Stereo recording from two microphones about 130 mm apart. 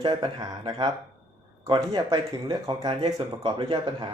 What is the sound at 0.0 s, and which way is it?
Speech, 30° right (ahead or behind).